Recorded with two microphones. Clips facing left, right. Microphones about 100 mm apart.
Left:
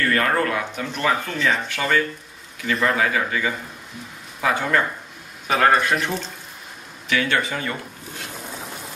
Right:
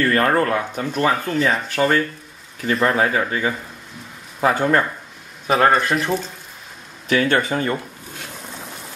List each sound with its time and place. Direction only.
0.1 s speech: 35° right (ahead or behind)
5.7 s speech: centre (ahead or behind)
7.1 s speech: 40° right (ahead or behind)